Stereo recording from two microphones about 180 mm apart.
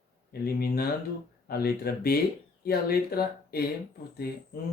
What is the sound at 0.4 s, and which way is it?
Speech, 60° left (ahead or behind).